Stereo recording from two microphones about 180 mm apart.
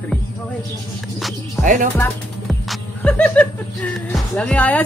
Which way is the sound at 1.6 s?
45° right (ahead or behind).